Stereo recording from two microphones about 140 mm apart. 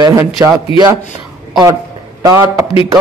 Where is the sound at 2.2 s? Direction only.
25° right (ahead or behind).